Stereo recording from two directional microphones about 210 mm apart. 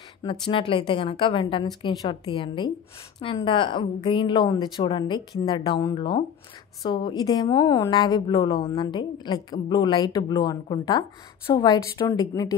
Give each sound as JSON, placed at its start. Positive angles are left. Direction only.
{"t": 0.2, "sound": "a woman's voice", "side_deg": 25}